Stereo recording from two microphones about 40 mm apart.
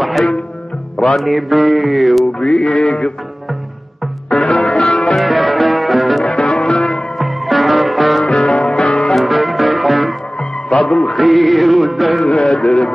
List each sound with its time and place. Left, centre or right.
0.0 s music: centre
1.0 s mantra: centre
2.7 s music: left
4.3 s music: centre
5.1 s music: centre
6.3 s music: left
7.2 s music: centre
8.3 s music: left
9.1 s music: centre
10.7 s music: left
11.1 s mantra: centre
12.3 s a man's voice: centre
12.5 s music: left